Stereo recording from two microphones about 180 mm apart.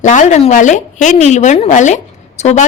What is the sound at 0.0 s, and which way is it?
A woman's voice, 45° left (ahead or behind).